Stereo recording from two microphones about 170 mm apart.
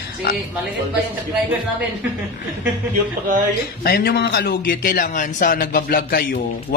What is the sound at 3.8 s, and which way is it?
A man's voice, 65° left (ahead or behind).